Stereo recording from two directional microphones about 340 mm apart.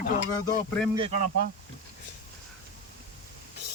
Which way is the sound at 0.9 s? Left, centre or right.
Centre.